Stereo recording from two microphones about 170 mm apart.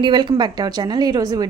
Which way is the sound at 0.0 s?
25° right (ahead or behind).